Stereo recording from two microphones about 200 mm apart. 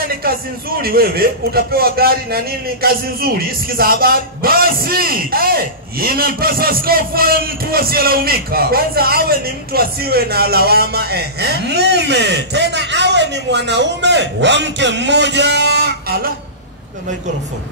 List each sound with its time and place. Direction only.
0.2 s a man's voice: 50° right (ahead or behind)